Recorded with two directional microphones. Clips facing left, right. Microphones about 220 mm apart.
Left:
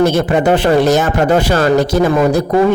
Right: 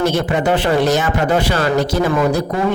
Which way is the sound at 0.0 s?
45° left (ahead or behind).